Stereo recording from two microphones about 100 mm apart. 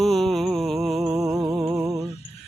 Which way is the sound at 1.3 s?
35° right (ahead or behind).